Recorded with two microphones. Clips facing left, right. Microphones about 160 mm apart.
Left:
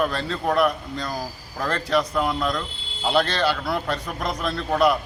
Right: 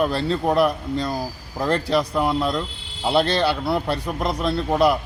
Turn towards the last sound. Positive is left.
turn(degrees=-25)  # may be behind; listen again after turning